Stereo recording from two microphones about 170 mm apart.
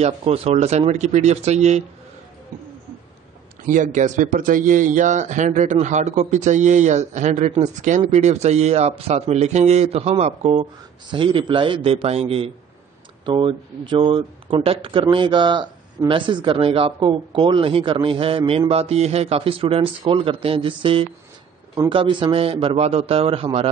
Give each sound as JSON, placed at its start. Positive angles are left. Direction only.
{"t": 0.0, "sound": "a man's voice", "side_deg": -35}
{"t": 3.6, "sound": "a man's voice", "side_deg": -50}